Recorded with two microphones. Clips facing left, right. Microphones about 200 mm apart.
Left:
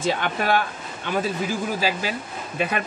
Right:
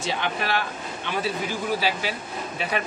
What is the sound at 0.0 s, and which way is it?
Speech, 50° left (ahead or behind).